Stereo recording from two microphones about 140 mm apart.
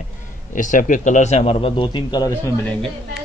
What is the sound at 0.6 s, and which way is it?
A man's voice, 70° left (ahead or behind).